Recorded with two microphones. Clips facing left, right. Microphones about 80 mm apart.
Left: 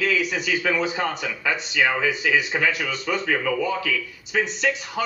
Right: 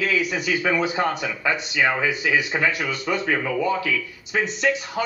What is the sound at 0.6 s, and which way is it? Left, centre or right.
A man's voice, right.